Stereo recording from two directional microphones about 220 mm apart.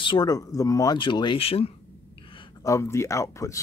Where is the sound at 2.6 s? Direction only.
15° left (ahead or behind).